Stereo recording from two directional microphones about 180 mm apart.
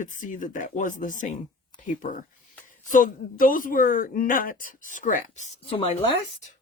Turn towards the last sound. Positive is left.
turn(degrees=35)  # may be behind; listen again after turning